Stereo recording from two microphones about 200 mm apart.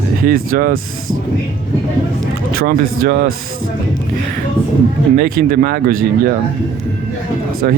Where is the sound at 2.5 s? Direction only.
50° right (ahead or behind).